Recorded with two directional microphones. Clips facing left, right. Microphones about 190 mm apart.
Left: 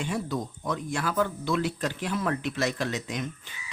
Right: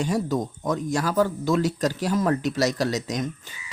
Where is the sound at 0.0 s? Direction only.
40° right (ahead or behind).